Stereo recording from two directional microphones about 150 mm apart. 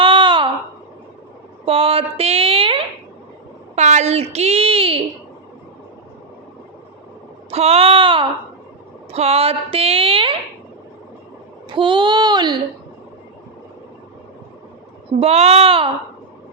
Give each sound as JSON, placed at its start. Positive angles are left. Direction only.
{"t": 0.0, "sound": "a sound", "side_deg": -30}
{"t": 1.6, "sound": "speech", "side_deg": -40}
{"t": 3.8, "sound": "a woman's voice", "side_deg": -50}
{"t": 7.5, "sound": "speech", "side_deg": -45}
{"t": 11.7, "sound": "a child's voice", "side_deg": -35}
{"t": 15.2, "sound": "a woman's voice", "side_deg": -45}